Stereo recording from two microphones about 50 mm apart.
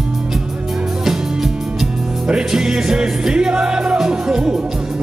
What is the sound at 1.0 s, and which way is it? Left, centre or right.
Music, centre.